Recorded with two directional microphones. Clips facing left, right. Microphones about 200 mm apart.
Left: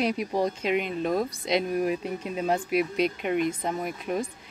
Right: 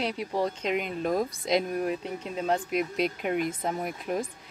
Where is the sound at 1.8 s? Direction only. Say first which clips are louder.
Left 3 dB; 10° left (ahead or behind).